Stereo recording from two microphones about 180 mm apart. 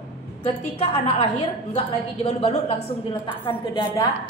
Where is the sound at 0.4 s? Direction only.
35° left (ahead or behind).